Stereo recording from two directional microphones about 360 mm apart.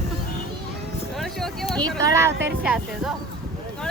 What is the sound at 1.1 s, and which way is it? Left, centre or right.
Speech, centre.